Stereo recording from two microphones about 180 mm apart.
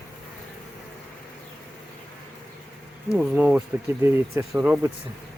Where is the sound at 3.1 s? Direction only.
5° right (ahead or behind).